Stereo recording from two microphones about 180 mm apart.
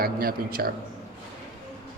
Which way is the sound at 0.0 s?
55° right (ahead or behind).